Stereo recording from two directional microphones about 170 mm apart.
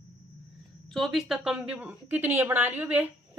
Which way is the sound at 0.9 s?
Centre (ahead or behind).